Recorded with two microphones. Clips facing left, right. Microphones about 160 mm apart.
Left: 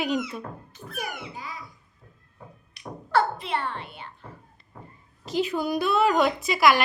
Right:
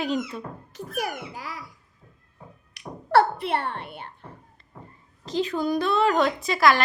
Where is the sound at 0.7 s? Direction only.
90° right.